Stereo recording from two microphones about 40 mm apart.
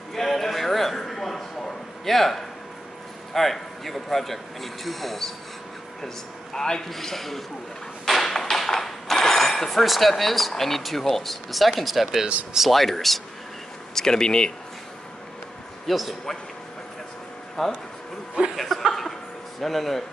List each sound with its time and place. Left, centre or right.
0.1 s a sound: centre
2.0 s speech: centre
6.0 s a man's voice: centre
8.1 s a sound: centre
9.1 s speech: centre
13.9 s speech: centre
15.9 s speech: centre
17.6 s speech: centre
18.6 s chuckle: centre
19.6 s speech: centre